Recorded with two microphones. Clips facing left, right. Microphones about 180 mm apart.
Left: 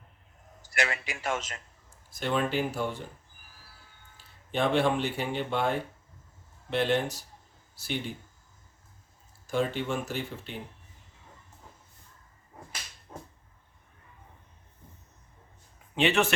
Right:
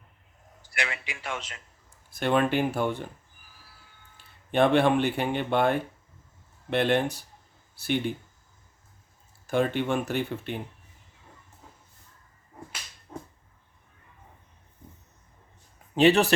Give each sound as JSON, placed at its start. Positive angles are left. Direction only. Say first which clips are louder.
{"t": 0.7, "sound": "speech", "louder": "left 3 dB", "side_deg": 45}
{"t": 2.0, "sound": "speech", "louder": "right 5 dB", "side_deg": -60}
{"t": 4.5, "sound": "speech", "louder": "right 5 dB", "side_deg": -60}
{"t": 9.5, "sound": "speech", "louder": "right 4 dB", "side_deg": -60}
{"t": 16.0, "sound": "speech", "louder": "right 6 dB", "side_deg": -35}